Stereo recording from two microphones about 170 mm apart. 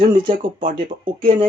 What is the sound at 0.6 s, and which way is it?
Speech, 50° right (ahead or behind).